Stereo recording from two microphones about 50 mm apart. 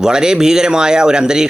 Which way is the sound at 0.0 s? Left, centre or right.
Centre.